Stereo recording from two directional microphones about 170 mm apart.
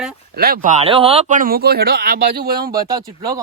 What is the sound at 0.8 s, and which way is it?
Speech, 35° right (ahead or behind).